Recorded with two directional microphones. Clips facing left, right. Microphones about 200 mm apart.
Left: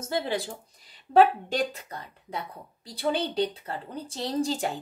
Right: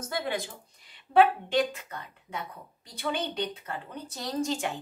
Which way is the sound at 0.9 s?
40° left (ahead or behind).